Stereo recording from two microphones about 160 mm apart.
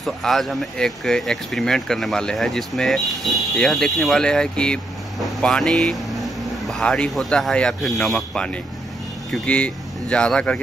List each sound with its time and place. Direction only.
0.0 s speech: centre (ahead or behind)